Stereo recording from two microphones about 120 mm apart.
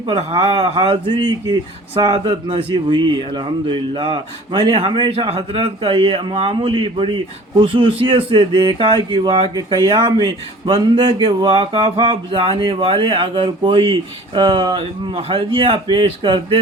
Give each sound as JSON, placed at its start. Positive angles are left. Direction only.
{"t": 0.0, "sound": "a man's voice", "side_deg": -50}